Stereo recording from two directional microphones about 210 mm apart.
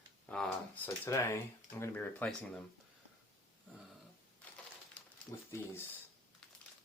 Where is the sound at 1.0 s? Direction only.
15° left (ahead or behind).